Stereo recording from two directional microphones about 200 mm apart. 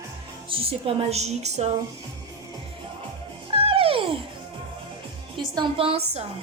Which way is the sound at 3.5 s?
25° right (ahead or behind).